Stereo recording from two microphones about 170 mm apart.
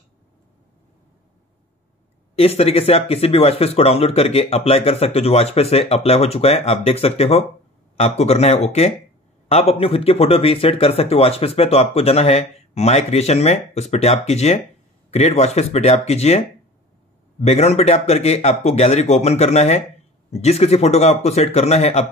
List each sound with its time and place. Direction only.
2.3 s speech: 35° left (ahead or behind)